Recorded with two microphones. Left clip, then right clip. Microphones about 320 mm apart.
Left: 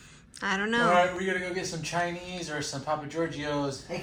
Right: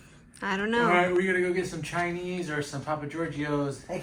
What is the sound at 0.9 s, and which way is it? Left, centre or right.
Speech, left.